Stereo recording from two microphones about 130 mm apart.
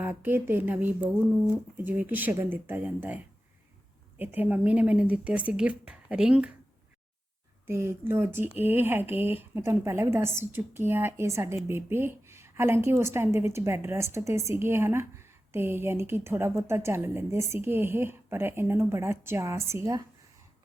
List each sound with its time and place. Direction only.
0.0 s speech: 15° right (ahead or behind)
4.2 s speech: 15° right (ahead or behind)
7.7 s a woman's voice: 20° right (ahead or behind)